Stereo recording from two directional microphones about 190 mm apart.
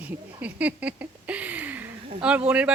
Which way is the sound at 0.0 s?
10° right (ahead or behind).